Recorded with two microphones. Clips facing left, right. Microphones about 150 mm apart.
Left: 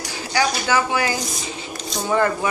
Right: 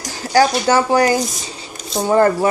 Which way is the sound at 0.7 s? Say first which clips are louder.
Right 7 dB; 35° right (ahead or behind).